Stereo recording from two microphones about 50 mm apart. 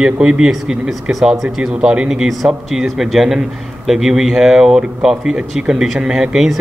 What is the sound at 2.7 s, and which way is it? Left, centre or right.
A man's voice, centre.